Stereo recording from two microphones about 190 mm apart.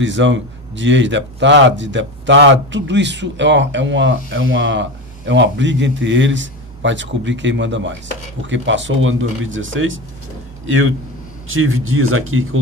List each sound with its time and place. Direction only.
0.0 s speech: 75° right (ahead or behind)
11.4 s a man's voice: 90° right